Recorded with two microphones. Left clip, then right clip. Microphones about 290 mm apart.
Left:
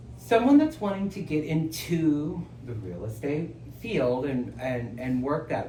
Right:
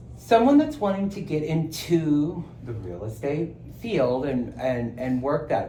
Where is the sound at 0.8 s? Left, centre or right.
Centre.